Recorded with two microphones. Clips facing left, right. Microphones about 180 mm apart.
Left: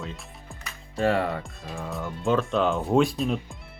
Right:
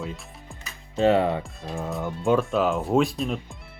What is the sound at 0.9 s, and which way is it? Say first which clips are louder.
Speech: right 4 dB; 20° right (ahead or behind).